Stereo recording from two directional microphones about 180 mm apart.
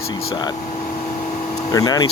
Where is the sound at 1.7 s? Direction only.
20° left (ahead or behind).